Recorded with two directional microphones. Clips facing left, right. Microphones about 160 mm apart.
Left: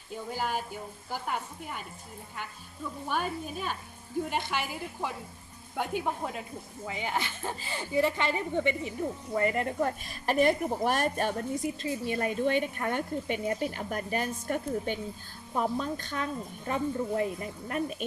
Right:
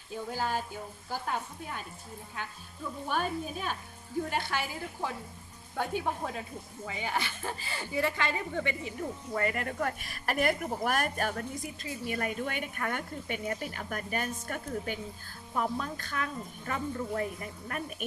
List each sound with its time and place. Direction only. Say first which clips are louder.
0.3 s speech: left 1 dB; 15° left (ahead or behind)
3.1 s speech: even; 10° left (ahead or behind); by 18.0 s 25° left (ahead or behind)